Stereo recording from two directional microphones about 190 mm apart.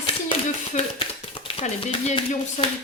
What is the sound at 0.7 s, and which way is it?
Speech, 30° left (ahead or behind).